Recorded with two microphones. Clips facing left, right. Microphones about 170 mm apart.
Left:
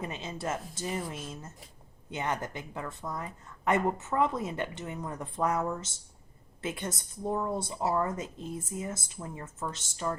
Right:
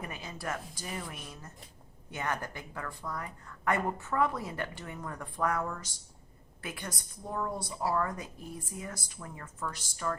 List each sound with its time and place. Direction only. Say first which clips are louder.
0.0 s a woman's voice: left 4 dB; 20° left (ahead or behind)